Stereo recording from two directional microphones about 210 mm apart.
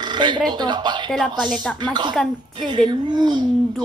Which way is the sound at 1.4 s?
5° left (ahead or behind).